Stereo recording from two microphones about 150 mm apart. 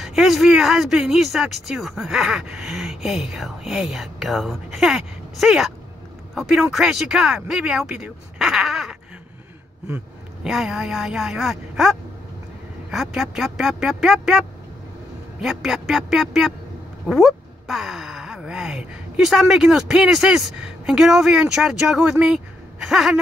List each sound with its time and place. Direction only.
0.0 s speech: centre (ahead or behind)
15.4 s speech: centre (ahead or behind)